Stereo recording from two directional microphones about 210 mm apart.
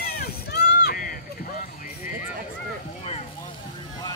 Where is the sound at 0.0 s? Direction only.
45° left (ahead or behind).